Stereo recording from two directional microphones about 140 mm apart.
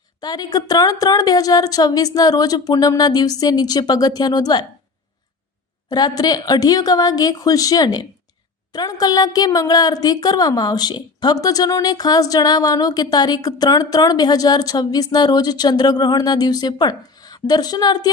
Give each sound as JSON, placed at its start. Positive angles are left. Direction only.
{"t": 0.2, "sound": "speech", "side_deg": 30}
{"t": 5.9, "sound": "speech", "side_deg": 30}